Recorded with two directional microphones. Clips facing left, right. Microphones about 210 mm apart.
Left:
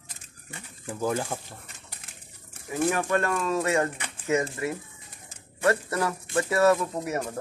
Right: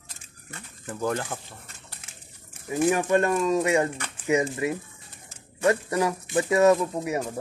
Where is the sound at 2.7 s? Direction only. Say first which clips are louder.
Right 3 dB; 15° right (ahead or behind).